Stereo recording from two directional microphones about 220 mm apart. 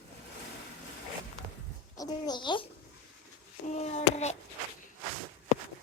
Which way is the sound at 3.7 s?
30° left (ahead or behind).